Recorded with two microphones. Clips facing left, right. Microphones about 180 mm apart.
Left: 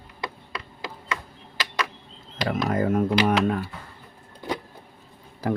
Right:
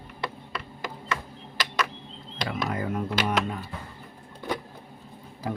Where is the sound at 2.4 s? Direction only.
50° left (ahead or behind).